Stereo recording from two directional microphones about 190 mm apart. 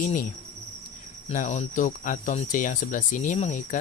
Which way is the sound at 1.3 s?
40° left (ahead or behind).